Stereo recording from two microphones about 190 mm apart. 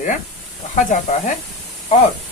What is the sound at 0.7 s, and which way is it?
Speech, 40° left (ahead or behind).